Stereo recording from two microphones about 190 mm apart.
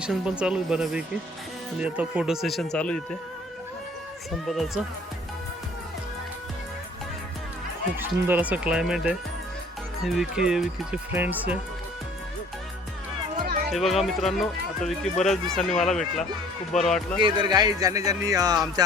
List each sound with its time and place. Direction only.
0.0 s speech: 5° right (ahead or behind)
4.3 s speech: centre (ahead or behind)
7.9 s speech: 10° right (ahead or behind)
13.4 s music: 50° right (ahead or behind)
13.7 s speech: centre (ahead or behind)
17.2 s speech: 25° right (ahead or behind)